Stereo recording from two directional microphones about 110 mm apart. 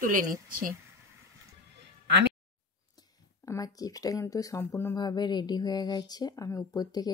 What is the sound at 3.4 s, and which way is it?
Speech, 30° left (ahead or behind).